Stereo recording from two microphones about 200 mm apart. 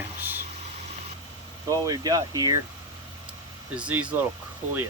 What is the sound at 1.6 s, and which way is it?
Speech, 20° right (ahead or behind).